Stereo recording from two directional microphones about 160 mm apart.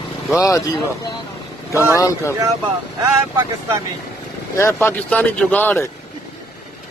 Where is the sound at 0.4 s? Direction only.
20° left (ahead or behind).